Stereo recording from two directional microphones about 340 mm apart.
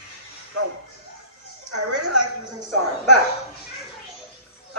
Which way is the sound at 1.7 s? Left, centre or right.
Right.